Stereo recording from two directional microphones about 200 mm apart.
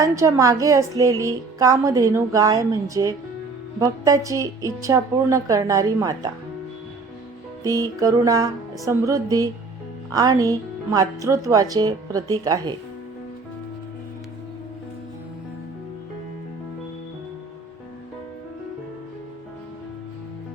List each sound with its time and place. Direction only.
0.0 s a woman's voice: 15° right (ahead or behind)
7.6 s a woman's voice: 15° right (ahead or behind)